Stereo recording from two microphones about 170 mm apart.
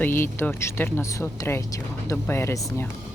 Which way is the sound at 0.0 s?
15° left (ahead or behind).